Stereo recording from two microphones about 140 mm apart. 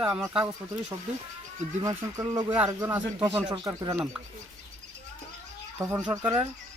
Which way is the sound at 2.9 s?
15° right (ahead or behind).